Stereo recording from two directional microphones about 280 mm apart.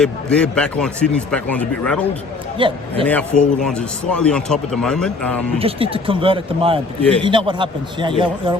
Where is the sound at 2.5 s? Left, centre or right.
Centre.